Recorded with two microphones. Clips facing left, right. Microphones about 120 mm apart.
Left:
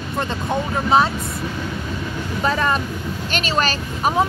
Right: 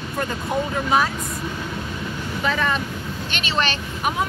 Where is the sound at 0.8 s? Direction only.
30° left (ahead or behind).